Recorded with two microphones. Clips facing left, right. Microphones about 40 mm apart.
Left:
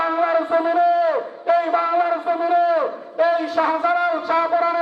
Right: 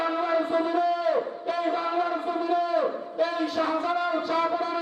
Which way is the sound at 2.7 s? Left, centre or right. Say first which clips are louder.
Left 5 dB; left.